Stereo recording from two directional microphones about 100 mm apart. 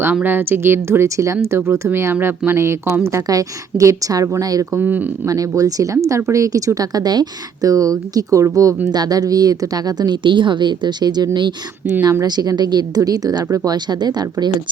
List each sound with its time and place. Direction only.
0.0 s speech: 20° right (ahead or behind); by 4.8 s 35° right (ahead or behind)
4.8 s speech: 20° right (ahead or behind)
5.2 s a woman's voice: 35° right (ahead or behind)